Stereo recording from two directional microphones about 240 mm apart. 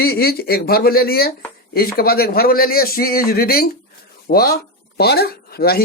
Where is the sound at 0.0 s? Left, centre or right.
Left.